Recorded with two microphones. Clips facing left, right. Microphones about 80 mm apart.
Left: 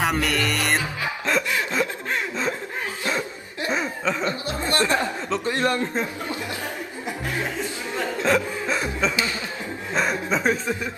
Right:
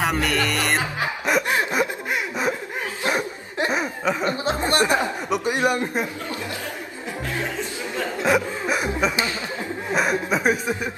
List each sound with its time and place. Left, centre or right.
0.0 s speech: centre
1.8 s snicker: right
3.0 s chuckle: right
8.2 s chuckle: centre
9.9 s speech: centre